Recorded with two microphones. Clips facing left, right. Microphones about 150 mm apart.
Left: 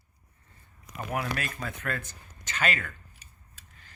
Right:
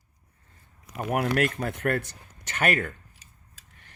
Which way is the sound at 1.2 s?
65° right (ahead or behind).